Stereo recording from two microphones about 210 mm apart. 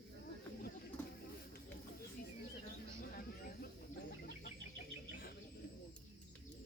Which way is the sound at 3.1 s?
45° left (ahead or behind).